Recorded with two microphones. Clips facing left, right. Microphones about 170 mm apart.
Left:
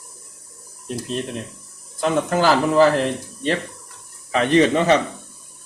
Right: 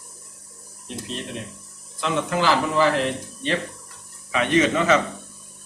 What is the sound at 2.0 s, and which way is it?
Speech, 45° left (ahead or behind).